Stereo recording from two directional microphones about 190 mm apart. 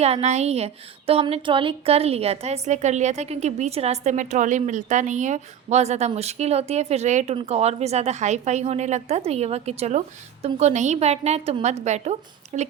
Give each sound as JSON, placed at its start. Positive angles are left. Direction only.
{"t": 0.0, "sound": "speech", "side_deg": -35}